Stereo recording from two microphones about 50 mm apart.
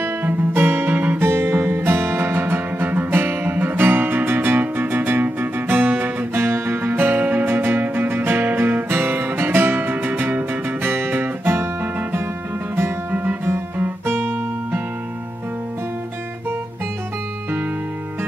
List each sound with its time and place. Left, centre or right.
0.2 s music: right
1.2 s music: right
13.1 s music: right
14.0 s guitar: right